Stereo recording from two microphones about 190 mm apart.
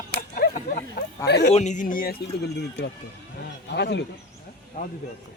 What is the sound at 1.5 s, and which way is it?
Speech, 35° left (ahead or behind).